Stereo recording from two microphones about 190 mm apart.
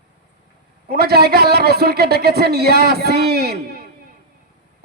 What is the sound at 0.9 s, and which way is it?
A man's voice, 55° right (ahead or behind).